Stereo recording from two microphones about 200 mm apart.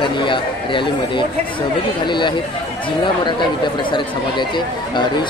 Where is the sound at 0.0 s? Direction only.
25° left (ahead or behind).